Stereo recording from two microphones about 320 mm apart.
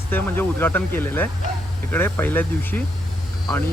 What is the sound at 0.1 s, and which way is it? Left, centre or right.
Speech, centre.